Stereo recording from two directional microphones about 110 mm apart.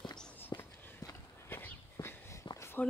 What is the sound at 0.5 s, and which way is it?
Walk, 30° left (ahead or behind).